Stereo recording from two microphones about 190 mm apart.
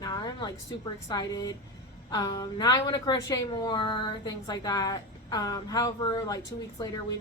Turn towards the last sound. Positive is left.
turn(degrees=20)  # may be behind; listen again after turning